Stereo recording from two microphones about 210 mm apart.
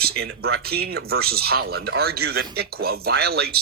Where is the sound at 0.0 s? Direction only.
50° right (ahead or behind).